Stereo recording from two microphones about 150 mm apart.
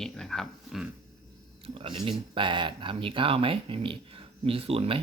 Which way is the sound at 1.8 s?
35° right (ahead or behind).